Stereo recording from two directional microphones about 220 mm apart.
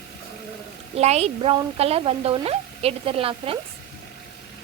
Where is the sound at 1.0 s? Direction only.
30° right (ahead or behind).